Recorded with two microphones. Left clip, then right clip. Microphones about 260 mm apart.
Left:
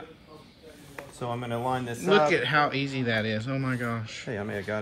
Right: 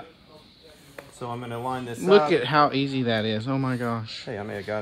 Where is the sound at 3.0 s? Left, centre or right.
Right.